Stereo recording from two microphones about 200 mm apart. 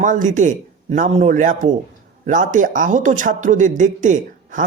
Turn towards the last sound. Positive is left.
turn(degrees=-40)  # may be behind; listen again after turning